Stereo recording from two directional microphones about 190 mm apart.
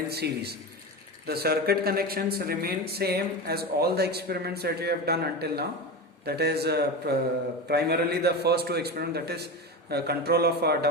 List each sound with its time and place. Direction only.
0.1 s a man's voice: 60° right (ahead or behind)